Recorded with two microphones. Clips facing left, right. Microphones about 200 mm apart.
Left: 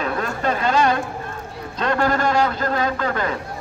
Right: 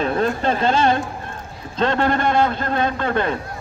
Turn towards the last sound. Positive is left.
turn(degrees=-25)  # may be behind; listen again after turning